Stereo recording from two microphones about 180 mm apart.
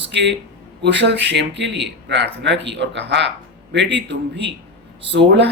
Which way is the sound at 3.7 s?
85° right.